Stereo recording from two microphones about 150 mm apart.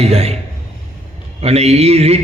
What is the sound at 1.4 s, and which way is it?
Speech, 45° right (ahead or behind).